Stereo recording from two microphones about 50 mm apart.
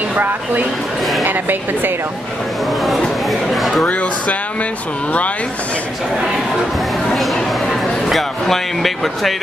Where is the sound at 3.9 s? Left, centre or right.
Left.